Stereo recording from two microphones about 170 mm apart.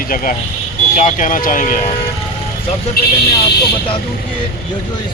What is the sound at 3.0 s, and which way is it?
Speech, 65° left (ahead or behind).